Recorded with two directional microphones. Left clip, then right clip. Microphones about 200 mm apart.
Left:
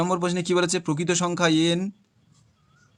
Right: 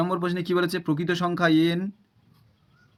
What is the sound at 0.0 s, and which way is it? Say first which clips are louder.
Speech: left 2 dB; 30° left (ahead or behind).